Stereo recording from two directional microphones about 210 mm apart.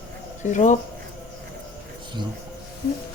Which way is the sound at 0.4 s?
35° left (ahead or behind).